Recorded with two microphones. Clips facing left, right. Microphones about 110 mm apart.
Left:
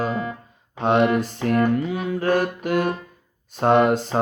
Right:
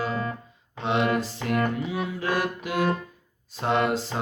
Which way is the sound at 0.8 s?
50° left (ahead or behind).